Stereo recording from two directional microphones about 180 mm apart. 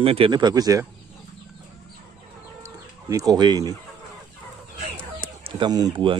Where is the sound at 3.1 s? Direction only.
20° right (ahead or behind).